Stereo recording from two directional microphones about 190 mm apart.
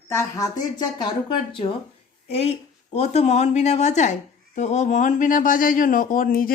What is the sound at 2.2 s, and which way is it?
Speech, 35° left (ahead or behind).